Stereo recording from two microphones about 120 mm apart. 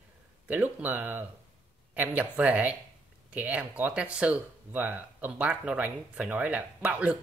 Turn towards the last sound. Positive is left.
turn(degrees=-10)  # may be behind; listen again after turning